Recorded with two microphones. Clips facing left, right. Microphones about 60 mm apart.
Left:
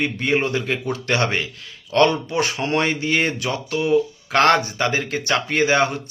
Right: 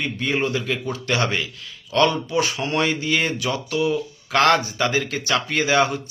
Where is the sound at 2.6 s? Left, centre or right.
Left.